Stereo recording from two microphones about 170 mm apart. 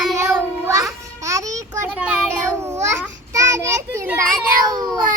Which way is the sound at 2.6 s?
15° right (ahead or behind).